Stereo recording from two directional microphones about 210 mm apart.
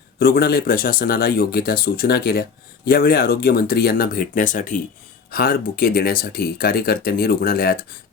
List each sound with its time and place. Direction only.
0.2 s speech: 45° left (ahead or behind)